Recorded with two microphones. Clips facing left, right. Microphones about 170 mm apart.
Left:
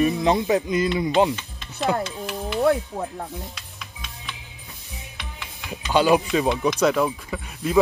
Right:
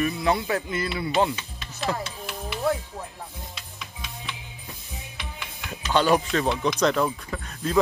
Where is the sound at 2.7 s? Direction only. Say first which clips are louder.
Left 5 dB; 65° left (ahead or behind).